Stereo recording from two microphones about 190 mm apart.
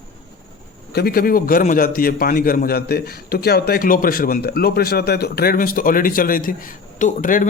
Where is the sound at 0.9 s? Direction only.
55° left (ahead or behind).